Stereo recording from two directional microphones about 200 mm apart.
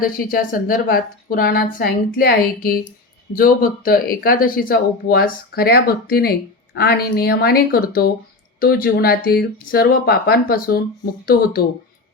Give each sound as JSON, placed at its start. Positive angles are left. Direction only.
{"t": 0.0, "sound": "speech", "side_deg": 45}